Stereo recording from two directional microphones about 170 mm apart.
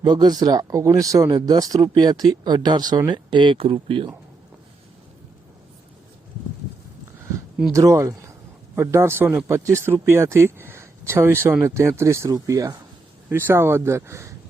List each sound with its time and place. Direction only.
0.0 s speech: 25° right (ahead or behind)
7.7 s speech: 20° right (ahead or behind)